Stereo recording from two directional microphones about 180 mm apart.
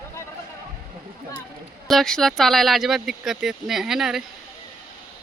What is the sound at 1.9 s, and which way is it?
Speech, centre (ahead or behind).